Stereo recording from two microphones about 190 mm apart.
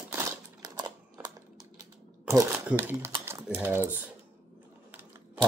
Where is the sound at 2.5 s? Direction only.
10° right (ahead or behind).